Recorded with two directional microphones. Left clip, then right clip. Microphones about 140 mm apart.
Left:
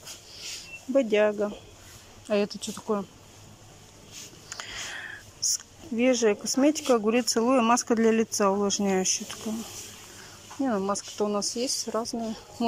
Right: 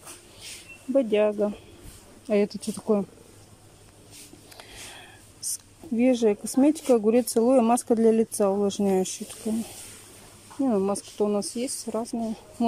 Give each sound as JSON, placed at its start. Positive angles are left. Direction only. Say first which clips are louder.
{"t": 0.9, "sound": "speech", "louder": "right 1 dB", "side_deg": -20}
{"t": 4.5, "sound": "a sound", "louder": "left 8 dB", "side_deg": -20}
{"t": 5.9, "sound": "speech", "louder": "right 1 dB", "side_deg": -25}